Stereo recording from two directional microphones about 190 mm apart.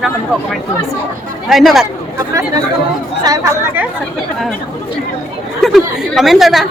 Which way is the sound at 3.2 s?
15° right (ahead or behind).